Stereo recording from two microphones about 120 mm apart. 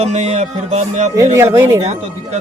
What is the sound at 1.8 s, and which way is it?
Speech, 70° right (ahead or behind).